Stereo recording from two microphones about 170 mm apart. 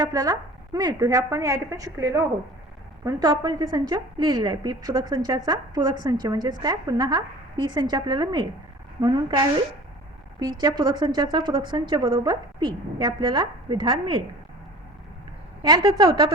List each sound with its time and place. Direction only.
0.0 s a woman's voice: 20° right (ahead or behind)
10.6 s a woman's voice: 25° right (ahead or behind)
15.6 s a woman's voice: 25° right (ahead or behind)